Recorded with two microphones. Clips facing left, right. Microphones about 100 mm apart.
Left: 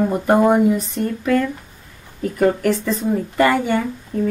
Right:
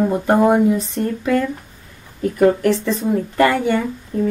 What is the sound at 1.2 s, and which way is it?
Speech, 15° right (ahead or behind).